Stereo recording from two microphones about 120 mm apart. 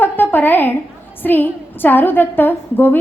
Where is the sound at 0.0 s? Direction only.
15° left (ahead or behind).